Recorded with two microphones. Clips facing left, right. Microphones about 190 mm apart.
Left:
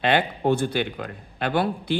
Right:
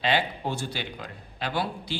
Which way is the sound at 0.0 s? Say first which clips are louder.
Left 5 dB; 55° left (ahead or behind).